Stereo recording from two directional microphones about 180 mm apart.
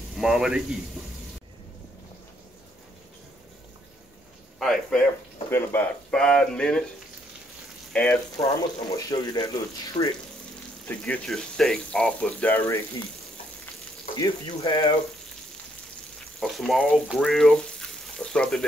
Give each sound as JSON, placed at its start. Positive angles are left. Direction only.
{"t": 0.2, "sound": "speech", "side_deg": -5}
{"t": 4.6, "sound": "speech", "side_deg": 0}
{"t": 7.9, "sound": "speech", "side_deg": 5}
{"t": 8.4, "sound": "speech", "side_deg": 20}
{"t": 10.9, "sound": "speech", "side_deg": 5}
{"t": 14.1, "sound": "speech", "side_deg": 20}
{"t": 16.3, "sound": "speech", "side_deg": 0}